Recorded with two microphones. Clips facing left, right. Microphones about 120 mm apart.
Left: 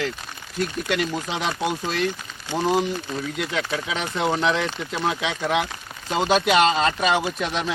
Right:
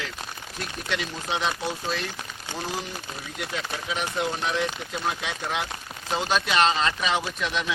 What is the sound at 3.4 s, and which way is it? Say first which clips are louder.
Speech: left 3 dB; 90° left.